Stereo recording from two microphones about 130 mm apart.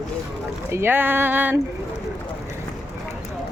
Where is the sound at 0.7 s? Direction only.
15° right (ahead or behind).